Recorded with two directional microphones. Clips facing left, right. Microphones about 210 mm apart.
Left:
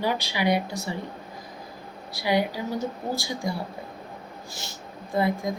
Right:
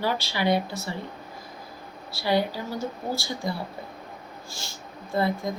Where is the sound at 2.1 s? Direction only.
15° left (ahead or behind).